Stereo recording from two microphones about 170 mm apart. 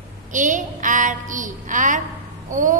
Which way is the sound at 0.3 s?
50° right (ahead or behind).